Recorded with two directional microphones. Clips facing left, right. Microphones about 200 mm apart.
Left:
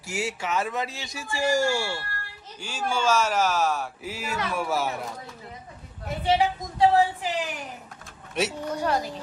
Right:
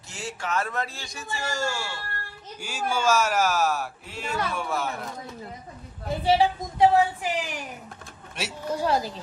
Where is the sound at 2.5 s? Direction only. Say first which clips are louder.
Even; 10° right (ahead or behind).